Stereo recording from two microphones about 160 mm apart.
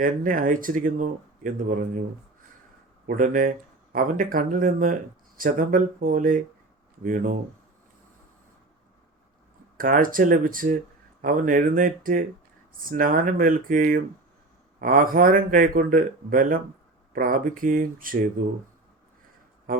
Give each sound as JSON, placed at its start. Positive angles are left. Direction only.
{"t": 0.0, "sound": "speech", "side_deg": -55}
{"t": 3.1, "sound": "speech", "side_deg": -55}
{"t": 9.7, "sound": "speech", "side_deg": -60}